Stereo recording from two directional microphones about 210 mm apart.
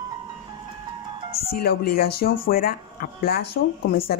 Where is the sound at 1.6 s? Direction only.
45° left (ahead or behind).